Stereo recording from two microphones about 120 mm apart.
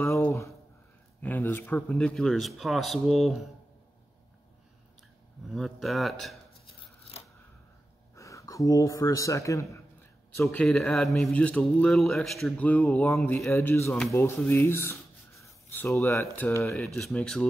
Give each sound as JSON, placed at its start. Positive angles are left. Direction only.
{"t": 0.3, "sound": "a sound", "side_deg": 25}
{"t": 1.2, "sound": "speech", "side_deg": 15}
{"t": 1.9, "sound": "speech", "side_deg": 5}
{"t": 5.5, "sound": "speech", "side_deg": 0}
{"t": 8.1, "sound": "a man's voice", "side_deg": 25}
{"t": 10.6, "sound": "speech", "side_deg": 5}
{"t": 16.7, "sound": "speech", "side_deg": 0}